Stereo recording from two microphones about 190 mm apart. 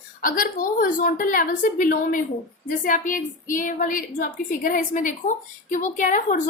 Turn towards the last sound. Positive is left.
turn(degrees=40)  # may be behind; listen again after turning